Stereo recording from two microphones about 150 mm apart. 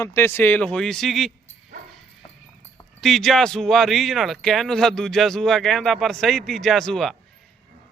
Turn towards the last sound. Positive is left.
turn(degrees=5)  # may be behind; listen again after turning